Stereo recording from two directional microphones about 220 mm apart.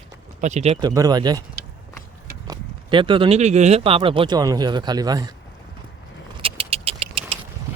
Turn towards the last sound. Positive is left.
turn(degrees=-25)  # may be behind; listen again after turning